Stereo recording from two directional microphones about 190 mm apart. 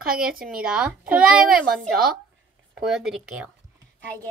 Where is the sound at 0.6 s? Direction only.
5° right (ahead or behind).